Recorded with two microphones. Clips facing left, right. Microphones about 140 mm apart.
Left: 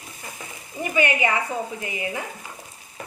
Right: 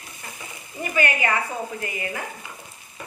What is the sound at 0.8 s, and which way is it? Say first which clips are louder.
A woman's voice: left 2 dB; 20° left (ahead or behind).